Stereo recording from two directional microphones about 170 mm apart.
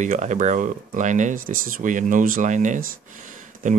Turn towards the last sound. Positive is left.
turn(degrees=-50)  # may be behind; listen again after turning